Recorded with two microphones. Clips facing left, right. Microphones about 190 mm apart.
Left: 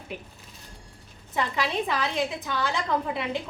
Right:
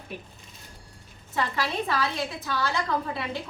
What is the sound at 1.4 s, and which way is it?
A woman's voice, 20° left (ahead or behind).